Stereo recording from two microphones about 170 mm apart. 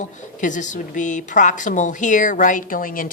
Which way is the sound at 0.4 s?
45° left (ahead or behind).